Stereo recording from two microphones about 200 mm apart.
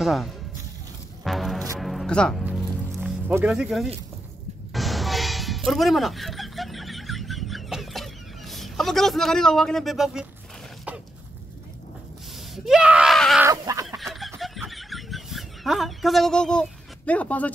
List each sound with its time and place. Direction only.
0.0 s speech: centre (ahead or behind)
1.2 s music: centre (ahead or behind)
3.0 s speech: 5° right (ahead or behind)
4.7 s music: centre (ahead or behind)
10.9 s a sound: 5° right (ahead or behind)
12.4 s screaming: centre (ahead or behind)
13.4 s a sound: 15° right (ahead or behind)
13.8 s snicker: centre (ahead or behind)
14.4 s a sound: centre (ahead or behind)